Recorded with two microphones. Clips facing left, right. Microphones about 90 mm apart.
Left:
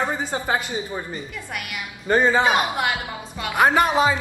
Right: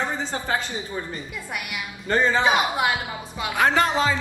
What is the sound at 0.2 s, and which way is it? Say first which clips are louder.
Speech: left 2 dB; 15° left (ahead or behind).